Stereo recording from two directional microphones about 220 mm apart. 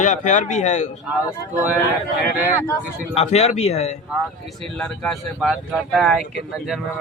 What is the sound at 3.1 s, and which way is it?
Speech, 30° left (ahead or behind).